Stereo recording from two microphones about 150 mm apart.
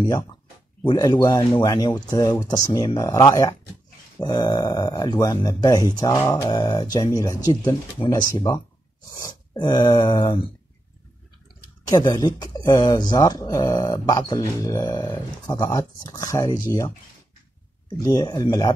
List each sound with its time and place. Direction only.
0.8 s speech: 30° left (ahead or behind)
9.6 s speech: 30° left (ahead or behind)
11.9 s speech: 25° left (ahead or behind)
15.6 s speech: 15° left (ahead or behind)